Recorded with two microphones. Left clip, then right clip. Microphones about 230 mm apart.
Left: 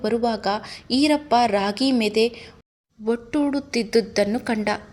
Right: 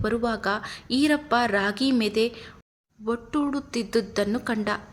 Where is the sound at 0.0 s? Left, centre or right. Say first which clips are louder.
Left 3 dB; centre.